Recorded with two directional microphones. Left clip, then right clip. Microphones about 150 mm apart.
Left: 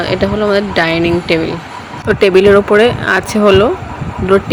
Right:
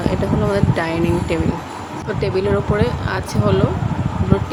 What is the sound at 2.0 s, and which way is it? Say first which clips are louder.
Speech: left 12 dB; 45° left (ahead or behind).